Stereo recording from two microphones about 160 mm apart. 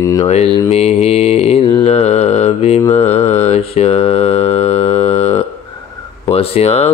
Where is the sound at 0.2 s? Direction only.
40° left (ahead or behind).